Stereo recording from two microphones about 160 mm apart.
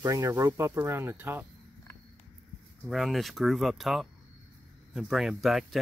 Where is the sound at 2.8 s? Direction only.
Centre (ahead or behind).